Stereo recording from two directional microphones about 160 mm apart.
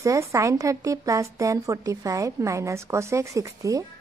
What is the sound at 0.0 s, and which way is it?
Speech, 20° right (ahead or behind).